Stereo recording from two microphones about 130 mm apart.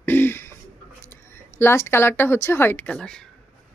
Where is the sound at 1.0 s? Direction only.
20° left (ahead or behind).